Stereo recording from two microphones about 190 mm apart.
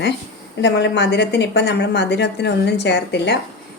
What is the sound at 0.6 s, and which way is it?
A woman's voice, 65° left (ahead or behind).